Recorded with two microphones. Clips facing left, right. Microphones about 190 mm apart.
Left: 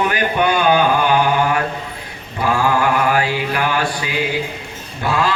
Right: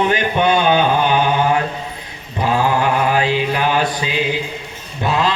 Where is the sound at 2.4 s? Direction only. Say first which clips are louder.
Even; 20° right (ahead or behind).